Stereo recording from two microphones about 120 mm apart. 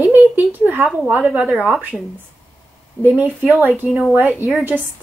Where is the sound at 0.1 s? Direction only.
15° right (ahead or behind).